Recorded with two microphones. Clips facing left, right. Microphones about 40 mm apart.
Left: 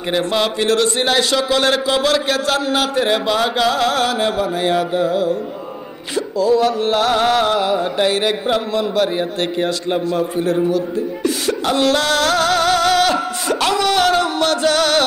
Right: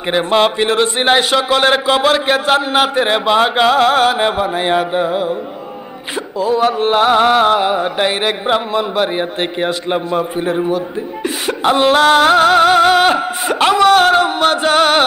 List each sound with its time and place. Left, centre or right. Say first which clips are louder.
0.0 s music: right 5 dB; right